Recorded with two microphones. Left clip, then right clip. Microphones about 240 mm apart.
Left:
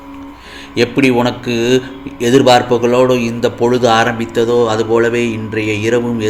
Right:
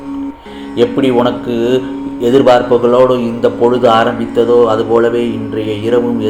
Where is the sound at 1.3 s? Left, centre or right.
Left.